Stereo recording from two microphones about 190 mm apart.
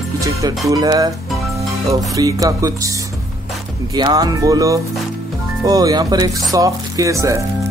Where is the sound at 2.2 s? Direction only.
20° right (ahead or behind).